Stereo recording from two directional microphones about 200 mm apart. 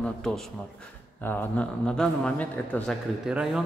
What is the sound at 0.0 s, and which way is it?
A man's voice, centre (ahead or behind).